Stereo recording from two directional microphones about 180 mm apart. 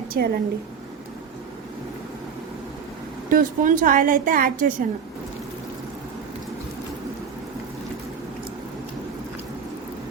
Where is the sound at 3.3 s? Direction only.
50° right (ahead or behind).